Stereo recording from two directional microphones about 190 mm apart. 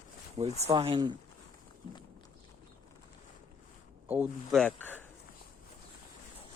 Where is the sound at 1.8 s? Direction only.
25° left (ahead or behind).